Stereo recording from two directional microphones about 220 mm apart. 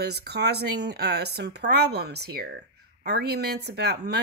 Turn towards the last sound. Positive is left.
turn(degrees=-50)  # may be behind; listen again after turning